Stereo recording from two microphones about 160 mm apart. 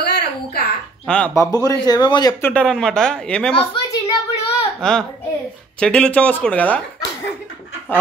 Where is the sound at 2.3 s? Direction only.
15° left (ahead or behind).